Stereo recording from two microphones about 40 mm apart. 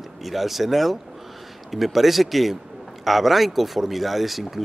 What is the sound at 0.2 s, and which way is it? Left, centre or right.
Speech, centre.